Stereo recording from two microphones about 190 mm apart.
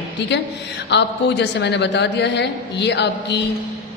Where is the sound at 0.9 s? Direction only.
65° left (ahead or behind).